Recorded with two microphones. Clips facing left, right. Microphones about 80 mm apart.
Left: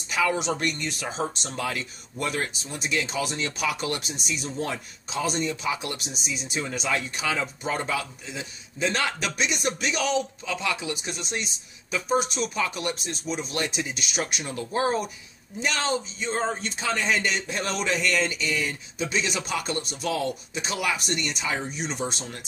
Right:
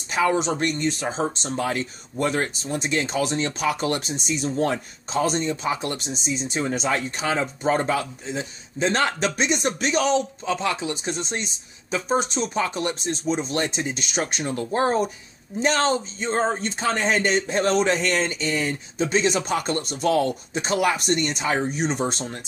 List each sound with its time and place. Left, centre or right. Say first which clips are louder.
0.1 s speech: right 4 dB; right